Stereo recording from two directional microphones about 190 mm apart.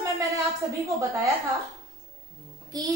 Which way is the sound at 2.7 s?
20° right (ahead or behind).